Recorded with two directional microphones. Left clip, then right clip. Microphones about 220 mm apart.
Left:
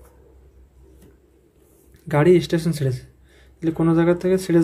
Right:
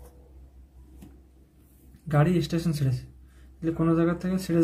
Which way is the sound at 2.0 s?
35° left (ahead or behind).